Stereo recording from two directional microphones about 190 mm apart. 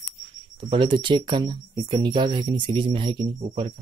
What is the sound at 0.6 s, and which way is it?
Speech, 25° right (ahead or behind).